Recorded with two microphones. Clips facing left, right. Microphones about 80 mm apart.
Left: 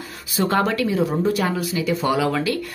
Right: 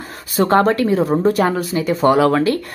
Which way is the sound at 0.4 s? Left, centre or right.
Right.